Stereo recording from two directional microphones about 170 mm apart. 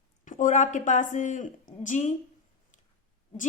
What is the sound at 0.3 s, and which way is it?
A woman's voice, 45° left (ahead or behind).